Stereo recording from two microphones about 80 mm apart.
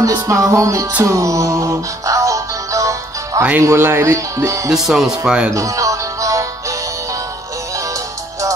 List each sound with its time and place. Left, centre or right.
0.0 s music: right
3.6 s speech: right
4.6 s speech: centre
5.5 s music: right